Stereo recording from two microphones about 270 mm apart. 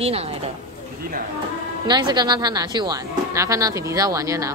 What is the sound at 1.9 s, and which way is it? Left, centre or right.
Speech, centre.